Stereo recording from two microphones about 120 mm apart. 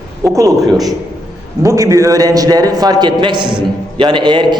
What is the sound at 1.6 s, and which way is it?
A man's voice, 25° right (ahead or behind).